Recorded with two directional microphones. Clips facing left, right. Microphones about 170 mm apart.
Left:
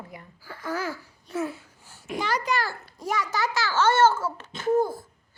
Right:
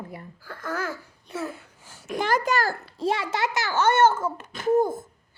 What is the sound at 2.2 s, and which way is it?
Speech, 50° right (ahead or behind).